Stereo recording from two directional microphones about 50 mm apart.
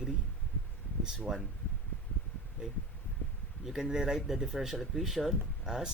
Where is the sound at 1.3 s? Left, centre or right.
Centre.